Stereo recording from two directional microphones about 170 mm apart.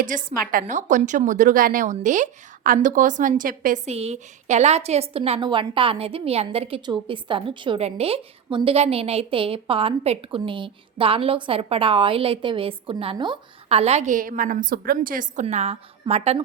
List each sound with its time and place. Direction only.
0.0 s a woman's voice: 50° right (ahead or behind)
3.9 s a woman's voice: 40° right (ahead or behind)